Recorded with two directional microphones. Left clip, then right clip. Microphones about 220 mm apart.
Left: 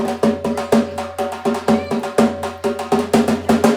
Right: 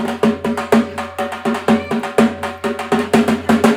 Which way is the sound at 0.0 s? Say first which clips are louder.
Right 1 dB; 45° right (ahead or behind).